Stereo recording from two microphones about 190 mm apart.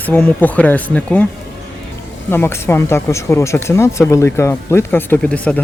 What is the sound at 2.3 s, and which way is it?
Speech, 10° left (ahead or behind).